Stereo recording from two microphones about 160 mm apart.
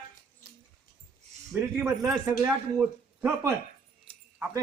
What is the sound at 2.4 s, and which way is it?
Speech, 15° right (ahead or behind).